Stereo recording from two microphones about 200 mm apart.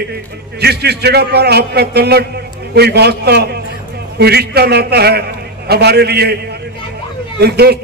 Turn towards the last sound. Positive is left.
turn(degrees=-55)  # may be behind; listen again after turning